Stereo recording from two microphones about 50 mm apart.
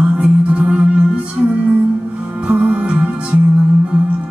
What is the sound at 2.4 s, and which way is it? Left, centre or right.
Music, right.